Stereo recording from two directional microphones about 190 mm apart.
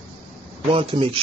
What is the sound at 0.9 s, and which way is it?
Speech, 25° right (ahead or behind).